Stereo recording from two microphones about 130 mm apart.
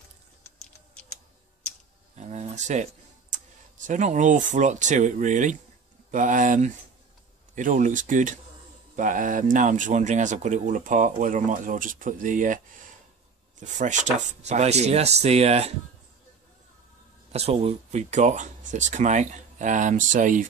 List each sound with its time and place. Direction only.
2.1 s speech: 65° right (ahead or behind); by 12.5 s 85° right
13.6 s speech: 70° right (ahead or behind); by 15.7 s 55° right (ahead or behind)
17.3 s speech: 50° right (ahead or behind); by 20.4 s 85° right